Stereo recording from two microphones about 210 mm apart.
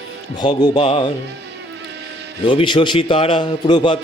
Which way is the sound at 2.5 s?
20° left (ahead or behind).